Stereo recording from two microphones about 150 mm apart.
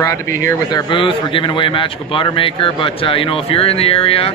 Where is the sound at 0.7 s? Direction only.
35° left (ahead or behind).